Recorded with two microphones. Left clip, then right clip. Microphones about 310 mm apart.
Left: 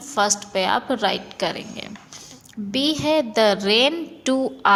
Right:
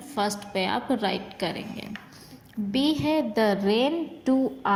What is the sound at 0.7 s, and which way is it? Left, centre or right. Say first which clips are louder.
Speech: left 7 dB; left.